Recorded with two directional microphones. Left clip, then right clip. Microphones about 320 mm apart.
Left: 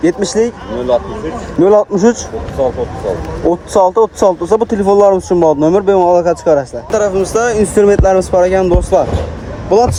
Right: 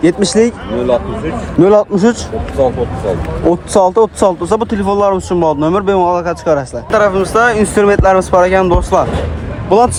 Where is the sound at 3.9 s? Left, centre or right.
Right.